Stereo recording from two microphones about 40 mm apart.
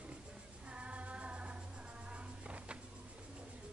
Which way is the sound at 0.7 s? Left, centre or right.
Right.